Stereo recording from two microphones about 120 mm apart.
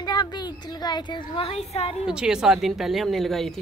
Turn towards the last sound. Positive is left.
turn(degrees=0)  # may be behind; listen again after turning